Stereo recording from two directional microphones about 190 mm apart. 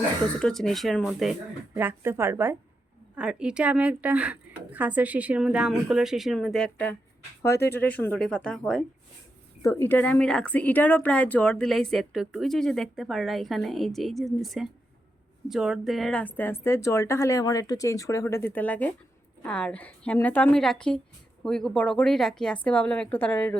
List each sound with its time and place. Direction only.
0.3 s speech: 5° left (ahead or behind)